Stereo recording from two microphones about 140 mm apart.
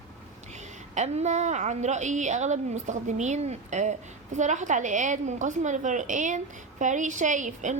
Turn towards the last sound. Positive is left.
turn(degrees=-60)  # may be behind; listen again after turning